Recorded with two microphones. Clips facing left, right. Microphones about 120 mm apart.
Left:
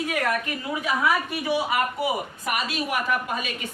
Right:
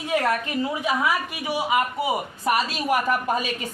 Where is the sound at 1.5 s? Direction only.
15° right (ahead or behind).